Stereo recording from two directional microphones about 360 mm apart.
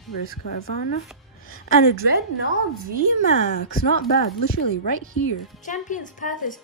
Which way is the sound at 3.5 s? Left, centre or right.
Left.